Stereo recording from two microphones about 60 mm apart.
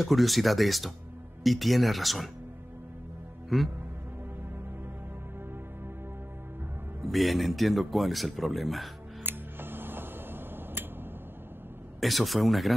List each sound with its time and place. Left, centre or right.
0.0 s speech: centre
3.4 s speech: centre
7.1 s speech: centre
9.2 s music: right
12.0 s speech: centre